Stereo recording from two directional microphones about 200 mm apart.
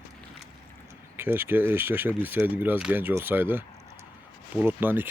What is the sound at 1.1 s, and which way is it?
Speech, 10° right (ahead or behind).